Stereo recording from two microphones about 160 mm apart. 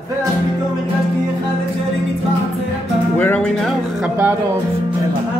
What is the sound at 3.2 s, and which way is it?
Music, 10° left (ahead or behind).